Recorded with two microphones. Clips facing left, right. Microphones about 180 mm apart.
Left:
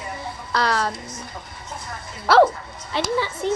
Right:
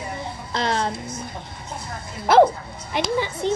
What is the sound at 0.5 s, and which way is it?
Music, 20° right (ahead or behind).